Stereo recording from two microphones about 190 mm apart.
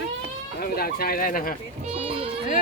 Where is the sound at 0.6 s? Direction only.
50° left (ahead or behind).